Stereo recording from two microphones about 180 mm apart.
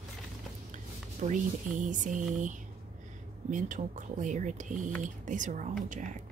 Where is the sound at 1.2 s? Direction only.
45° right (ahead or behind).